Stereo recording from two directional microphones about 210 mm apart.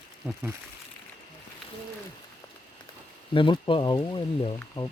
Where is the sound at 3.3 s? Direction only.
25° left (ahead or behind).